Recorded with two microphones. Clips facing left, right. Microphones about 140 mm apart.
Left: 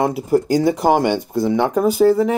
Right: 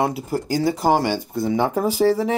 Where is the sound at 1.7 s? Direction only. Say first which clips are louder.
Left 6 dB; centre (ahead or behind).